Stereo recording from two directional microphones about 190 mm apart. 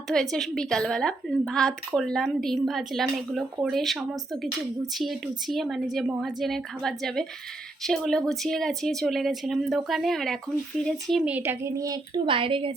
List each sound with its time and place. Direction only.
0.1 s a woman's voice: centre (ahead or behind)
4.9 s a woman's voice: centre (ahead or behind); by 12.7 s 30° right (ahead or behind)